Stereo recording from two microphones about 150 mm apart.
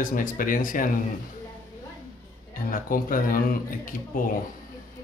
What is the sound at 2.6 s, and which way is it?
A man's voice, 65° left (ahead or behind).